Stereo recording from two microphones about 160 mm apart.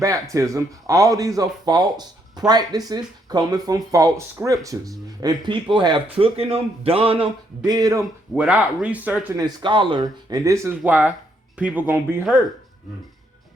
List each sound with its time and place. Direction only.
0.0 s speech: 20° right (ahead or behind)
8.4 s speech: 10° right (ahead or behind)
9.4 s speech: 25° right (ahead or behind); by 11.9 s 10° right (ahead or behind)